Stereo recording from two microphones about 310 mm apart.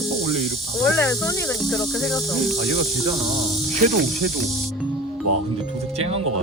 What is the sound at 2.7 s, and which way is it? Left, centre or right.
Snake, centre.